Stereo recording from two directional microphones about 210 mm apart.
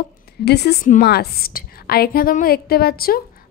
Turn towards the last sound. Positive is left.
turn(degrees=45)  # may be behind; listen again after turning